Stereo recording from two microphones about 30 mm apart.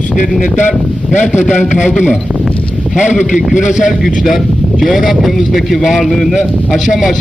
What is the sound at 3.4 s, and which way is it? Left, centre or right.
Speech, centre.